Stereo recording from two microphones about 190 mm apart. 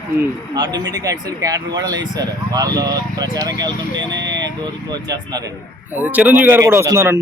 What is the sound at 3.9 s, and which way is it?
Speech, 70° right (ahead or behind).